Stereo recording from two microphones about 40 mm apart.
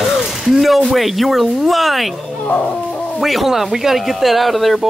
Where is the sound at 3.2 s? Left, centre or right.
Centre.